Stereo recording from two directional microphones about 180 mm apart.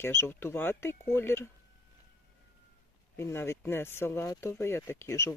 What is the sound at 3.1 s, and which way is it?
Speech, 15° left (ahead or behind).